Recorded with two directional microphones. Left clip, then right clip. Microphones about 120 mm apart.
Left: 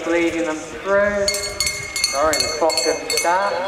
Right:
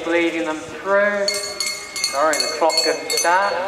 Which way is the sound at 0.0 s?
25° right (ahead or behind).